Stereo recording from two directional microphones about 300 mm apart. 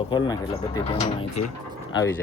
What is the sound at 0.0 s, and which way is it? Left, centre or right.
Speech, centre.